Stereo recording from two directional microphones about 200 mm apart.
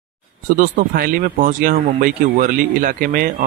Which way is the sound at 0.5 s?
45° right (ahead or behind).